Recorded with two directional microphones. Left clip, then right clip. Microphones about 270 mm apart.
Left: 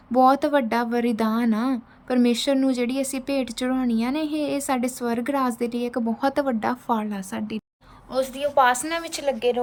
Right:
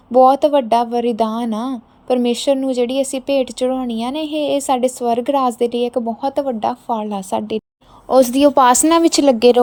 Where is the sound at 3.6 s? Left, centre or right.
Centre.